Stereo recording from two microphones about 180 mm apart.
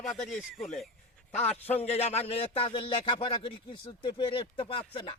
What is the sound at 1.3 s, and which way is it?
A man's voice, 35° left (ahead or behind).